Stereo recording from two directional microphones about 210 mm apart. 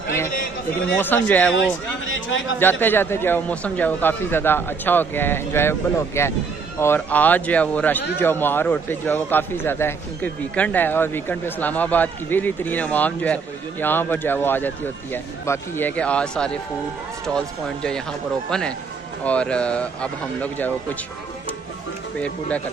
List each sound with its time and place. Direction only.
0.9 s a man's voice: 10° left (ahead or behind)
1.6 s a sound: 65° left (ahead or behind)
2.6 s a man's voice: 10° left (ahead or behind)
18.5 s speech: 5° left (ahead or behind)